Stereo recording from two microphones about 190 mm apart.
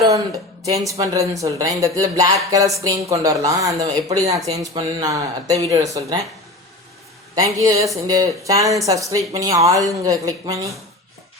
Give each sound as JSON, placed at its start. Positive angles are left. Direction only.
{"t": 0.9, "sound": "speech", "side_deg": -15}
{"t": 7.3, "sound": "speech", "side_deg": -15}